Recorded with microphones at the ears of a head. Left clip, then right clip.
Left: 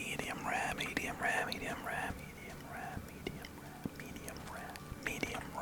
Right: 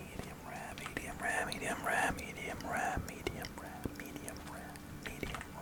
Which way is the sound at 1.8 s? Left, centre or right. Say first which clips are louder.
Right 6 dB; right.